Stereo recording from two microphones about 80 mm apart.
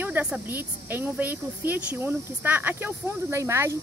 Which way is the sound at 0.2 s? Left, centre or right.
Right.